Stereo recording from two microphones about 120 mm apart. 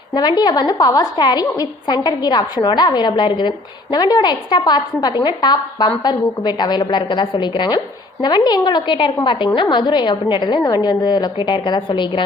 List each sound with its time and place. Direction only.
0.1 s a woman's voice: 35° left (ahead or behind)